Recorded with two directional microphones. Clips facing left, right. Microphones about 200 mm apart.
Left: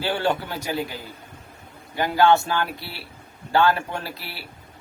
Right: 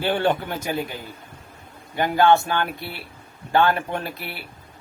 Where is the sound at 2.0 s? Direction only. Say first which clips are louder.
Right 1 dB; 20° right (ahead or behind).